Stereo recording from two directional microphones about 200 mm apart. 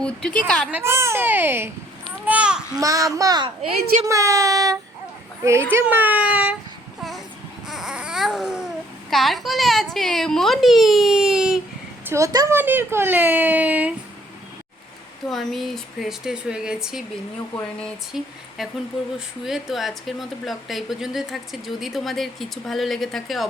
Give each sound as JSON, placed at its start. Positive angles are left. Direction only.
{"t": 0.0, "sound": "speech", "side_deg": 5}
{"t": 0.7, "sound": "speech", "side_deg": -10}
{"t": 2.0, "sound": "a sound", "side_deg": -5}
{"t": 2.7, "sound": "a child's voice", "side_deg": -15}
{"t": 3.8, "sound": "speech", "side_deg": -50}
{"t": 4.0, "sound": "speech", "side_deg": -15}
{"t": 7.7, "sound": "baby cry", "side_deg": -5}
{"t": 9.0, "sound": "a woman's voice", "side_deg": 0}
{"t": 12.0, "sound": "speech", "side_deg": -15}
{"t": 15.3, "sound": "speech", "side_deg": 0}